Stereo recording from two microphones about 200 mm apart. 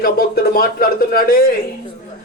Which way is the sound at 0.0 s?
50° left (ahead or behind).